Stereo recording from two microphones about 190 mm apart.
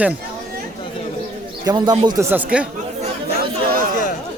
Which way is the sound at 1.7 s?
20° right (ahead or behind).